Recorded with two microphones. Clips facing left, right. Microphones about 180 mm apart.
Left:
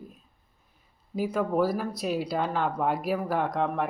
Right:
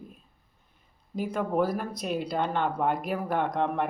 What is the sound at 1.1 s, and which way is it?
Speech, 5° left (ahead or behind).